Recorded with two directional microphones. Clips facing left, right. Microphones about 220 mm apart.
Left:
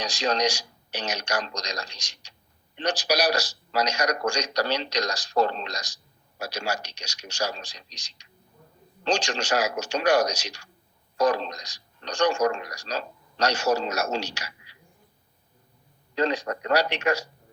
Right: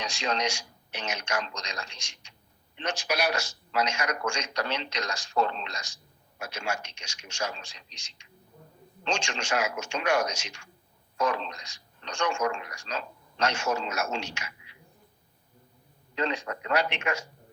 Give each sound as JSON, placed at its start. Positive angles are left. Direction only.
{"t": 0.0, "sound": "a man's voice", "side_deg": 40}
{"t": 16.1, "sound": "a man's voice", "side_deg": 40}